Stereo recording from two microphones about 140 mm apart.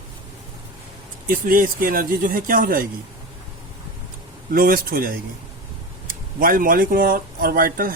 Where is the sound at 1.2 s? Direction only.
80° right.